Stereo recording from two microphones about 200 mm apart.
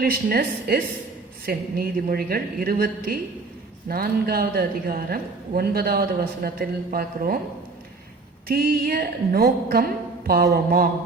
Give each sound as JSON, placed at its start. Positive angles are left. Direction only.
{"t": 0.0, "sound": "a woman's voice", "side_deg": -50}
{"t": 8.4, "sound": "a woman's voice", "side_deg": -50}